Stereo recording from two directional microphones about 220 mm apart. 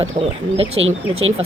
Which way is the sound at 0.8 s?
60° right (ahead or behind).